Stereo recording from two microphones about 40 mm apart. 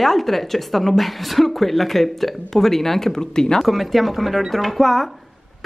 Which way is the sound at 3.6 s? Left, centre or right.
Centre.